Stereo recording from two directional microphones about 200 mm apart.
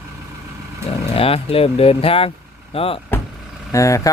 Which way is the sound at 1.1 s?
30° left (ahead or behind).